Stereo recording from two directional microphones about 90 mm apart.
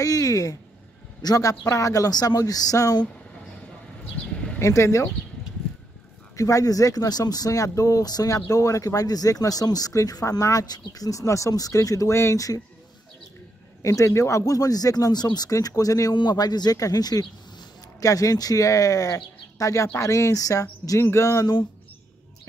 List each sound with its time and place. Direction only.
0.0 s speech: 40° left (ahead or behind)
4.6 s speech: 35° left (ahead or behind)
6.3 s speech: 40° left (ahead or behind)
13.8 s speech: 35° left (ahead or behind)